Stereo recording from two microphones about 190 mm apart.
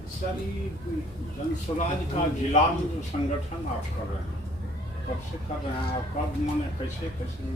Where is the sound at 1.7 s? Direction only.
25° left (ahead or behind).